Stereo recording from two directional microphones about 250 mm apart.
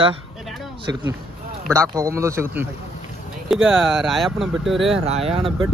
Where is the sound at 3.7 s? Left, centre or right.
Centre.